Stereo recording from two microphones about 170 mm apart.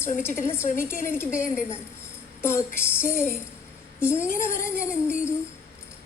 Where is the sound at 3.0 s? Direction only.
50° left (ahead or behind).